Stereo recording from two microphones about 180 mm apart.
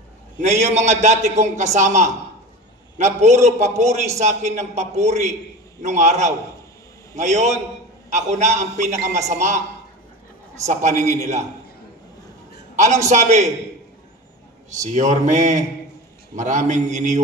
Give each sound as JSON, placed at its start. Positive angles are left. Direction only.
{"t": 0.4, "sound": "a man's voice", "side_deg": -40}
{"t": 10.7, "sound": "a man's voice", "side_deg": -40}
{"t": 12.7, "sound": "a man's voice", "side_deg": -40}
{"t": 14.8, "sound": "a man's voice", "side_deg": -40}